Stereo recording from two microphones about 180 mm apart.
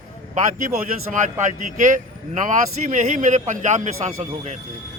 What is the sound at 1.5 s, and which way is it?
A man's voice, 45° right (ahead or behind).